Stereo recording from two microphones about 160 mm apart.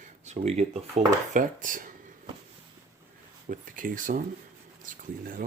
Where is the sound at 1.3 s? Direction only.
55° right (ahead or behind).